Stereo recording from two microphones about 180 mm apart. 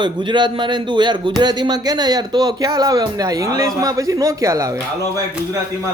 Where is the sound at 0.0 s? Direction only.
25° right (ahead or behind).